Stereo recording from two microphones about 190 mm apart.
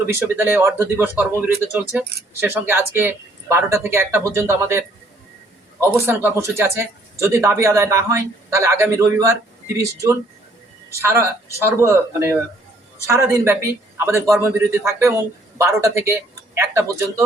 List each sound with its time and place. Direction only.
0.0 s a man's voice: 15° right (ahead or behind)
5.8 s a man's voice: 10° right (ahead or behind)